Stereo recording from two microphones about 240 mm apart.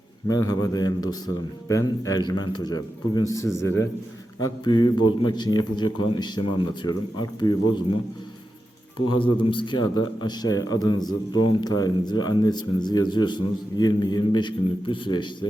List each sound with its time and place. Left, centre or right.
0.3 s speech: centre
9.0 s speech: left